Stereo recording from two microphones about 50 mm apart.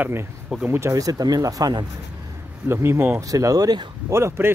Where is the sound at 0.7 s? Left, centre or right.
Right.